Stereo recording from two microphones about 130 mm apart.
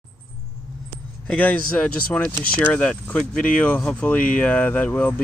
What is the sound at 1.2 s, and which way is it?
Speech, 10° left (ahead or behind).